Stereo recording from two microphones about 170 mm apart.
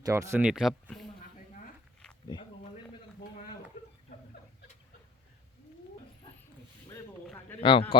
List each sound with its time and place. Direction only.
0.0 s speech: 15° right (ahead or behind); by 1.0 s centre (ahead or behind)
7.6 s a man's voice: 30° left (ahead or behind)